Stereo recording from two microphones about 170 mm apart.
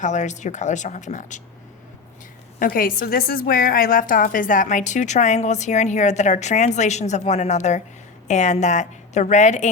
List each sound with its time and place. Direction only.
0.0 s a woman's voice: 45° left (ahead or behind)
2.6 s a woman's voice: 55° left (ahead or behind)